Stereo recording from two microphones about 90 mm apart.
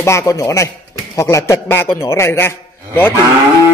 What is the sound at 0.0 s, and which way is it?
A man's voice, 35° left (ahead or behind).